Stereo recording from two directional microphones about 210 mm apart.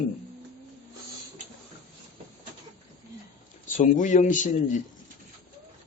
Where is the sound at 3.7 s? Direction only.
35° left (ahead or behind).